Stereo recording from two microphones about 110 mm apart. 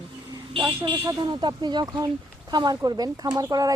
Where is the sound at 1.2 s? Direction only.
45° right (ahead or behind).